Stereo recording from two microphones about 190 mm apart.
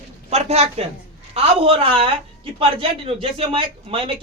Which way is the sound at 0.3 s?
35° right (ahead or behind).